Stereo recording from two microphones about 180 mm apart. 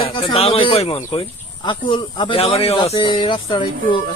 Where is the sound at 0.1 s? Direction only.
30° left (ahead or behind).